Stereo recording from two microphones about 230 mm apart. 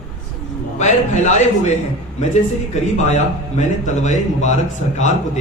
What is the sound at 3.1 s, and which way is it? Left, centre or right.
A man's voice, left.